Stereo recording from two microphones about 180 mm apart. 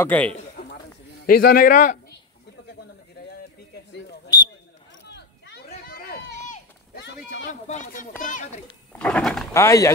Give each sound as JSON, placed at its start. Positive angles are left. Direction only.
{"t": 0.0, "sound": "speech", "side_deg": 10}
{"t": 1.2, "sound": "a man's voice", "side_deg": 50}
{"t": 3.2, "sound": "a sound", "side_deg": 65}
{"t": 5.9, "sound": "run", "side_deg": 55}
{"t": 7.6, "sound": "a man's voice", "side_deg": 40}
{"t": 8.9, "sound": "speech", "side_deg": 5}
{"t": 9.5, "sound": "speech", "side_deg": 15}